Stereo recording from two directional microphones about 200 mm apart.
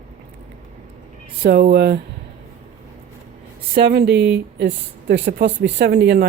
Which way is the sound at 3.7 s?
50° right (ahead or behind).